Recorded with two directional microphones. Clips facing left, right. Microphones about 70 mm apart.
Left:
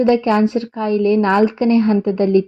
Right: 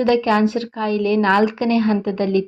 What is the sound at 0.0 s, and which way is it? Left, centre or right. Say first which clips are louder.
A woman's voice: left 2 dB; left.